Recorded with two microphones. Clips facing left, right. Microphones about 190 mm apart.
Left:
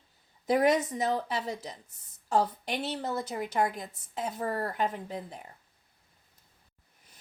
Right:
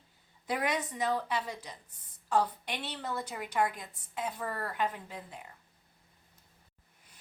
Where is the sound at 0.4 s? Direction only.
40° left (ahead or behind).